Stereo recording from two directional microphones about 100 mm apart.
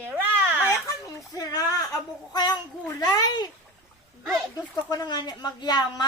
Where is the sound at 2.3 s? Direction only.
45° left (ahead or behind).